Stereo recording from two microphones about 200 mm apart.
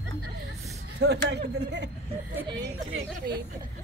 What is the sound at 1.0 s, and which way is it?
Speech, 55° right (ahead or behind).